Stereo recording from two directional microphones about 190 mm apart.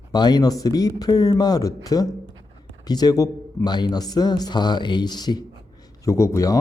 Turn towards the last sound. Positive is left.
turn(degrees=15)  # may be behind; listen again after turning